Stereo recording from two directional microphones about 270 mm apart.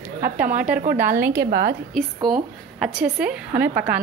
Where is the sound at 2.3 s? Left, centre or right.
Centre.